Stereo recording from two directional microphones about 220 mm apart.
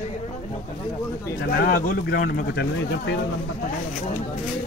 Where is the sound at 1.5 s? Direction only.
40° left (ahead or behind).